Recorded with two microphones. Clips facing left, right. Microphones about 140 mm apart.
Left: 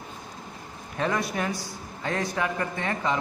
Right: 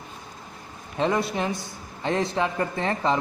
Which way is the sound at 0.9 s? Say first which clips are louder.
Right 3 dB; 25° right (ahead or behind).